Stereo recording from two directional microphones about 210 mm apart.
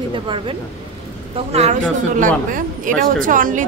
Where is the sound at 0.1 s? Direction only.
25° right (ahead or behind).